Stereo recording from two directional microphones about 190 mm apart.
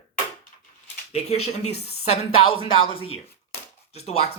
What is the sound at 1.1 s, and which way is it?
A woman's voice, 35° left (ahead or behind).